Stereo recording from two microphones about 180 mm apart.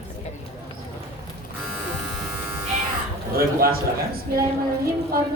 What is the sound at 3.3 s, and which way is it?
A man's voice, 55° right (ahead or behind).